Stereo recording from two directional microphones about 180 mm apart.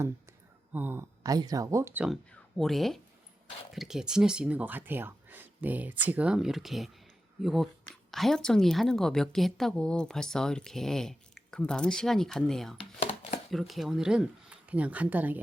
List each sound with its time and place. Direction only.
0.7 s speech: 10° right (ahead or behind)
2.0 s a woman's voice: centre (ahead or behind)
12.8 s a sound: 35° left (ahead or behind)
13.5 s a woman's voice: centre (ahead or behind)